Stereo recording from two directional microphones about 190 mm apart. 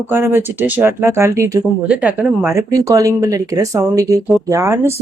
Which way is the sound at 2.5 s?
15° right (ahead or behind).